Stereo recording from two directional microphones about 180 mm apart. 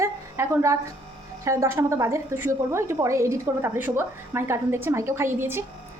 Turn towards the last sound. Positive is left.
turn(degrees=-15)  # may be behind; listen again after turning